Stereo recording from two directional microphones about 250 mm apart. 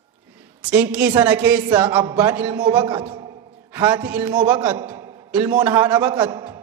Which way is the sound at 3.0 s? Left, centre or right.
Centre.